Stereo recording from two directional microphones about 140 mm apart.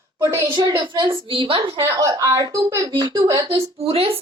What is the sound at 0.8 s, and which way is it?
Speech, 35° right (ahead or behind).